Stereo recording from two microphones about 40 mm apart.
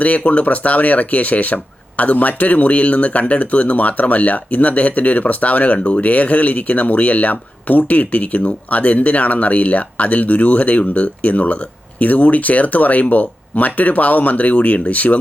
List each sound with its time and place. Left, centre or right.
0.3 s speech: left